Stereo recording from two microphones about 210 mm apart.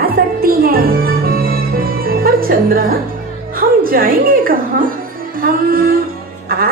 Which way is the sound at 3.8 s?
45° right (ahead or behind).